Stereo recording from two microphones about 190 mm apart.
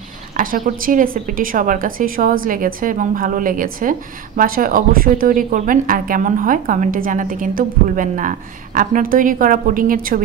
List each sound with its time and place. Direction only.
0.4 s a woman's voice: 45° right (ahead or behind)